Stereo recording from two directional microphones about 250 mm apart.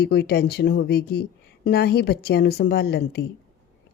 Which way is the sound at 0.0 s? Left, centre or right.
Left.